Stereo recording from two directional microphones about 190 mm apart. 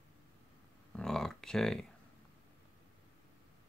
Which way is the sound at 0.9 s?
5° left (ahead or behind).